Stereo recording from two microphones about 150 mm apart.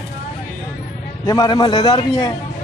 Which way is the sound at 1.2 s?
25° left (ahead or behind).